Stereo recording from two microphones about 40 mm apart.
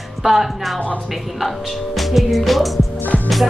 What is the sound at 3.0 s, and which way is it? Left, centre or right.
Music, left.